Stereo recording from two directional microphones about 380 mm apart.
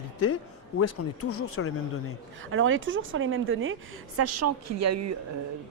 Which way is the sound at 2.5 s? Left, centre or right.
Right.